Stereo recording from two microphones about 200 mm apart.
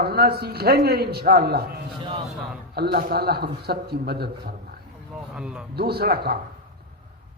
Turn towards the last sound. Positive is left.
turn(degrees=-50)  # may be behind; listen again after turning